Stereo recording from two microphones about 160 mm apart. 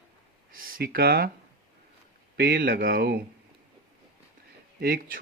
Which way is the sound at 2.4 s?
75° right (ahead or behind).